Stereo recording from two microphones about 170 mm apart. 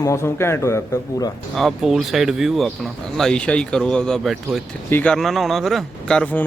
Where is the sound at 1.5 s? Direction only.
Centre (ahead or behind).